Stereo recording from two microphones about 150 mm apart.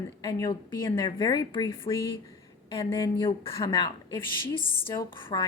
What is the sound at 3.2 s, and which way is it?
A woman's voice, 30° left (ahead or behind).